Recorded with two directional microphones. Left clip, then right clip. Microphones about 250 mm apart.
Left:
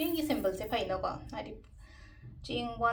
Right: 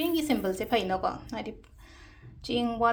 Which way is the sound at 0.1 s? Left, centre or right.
Right.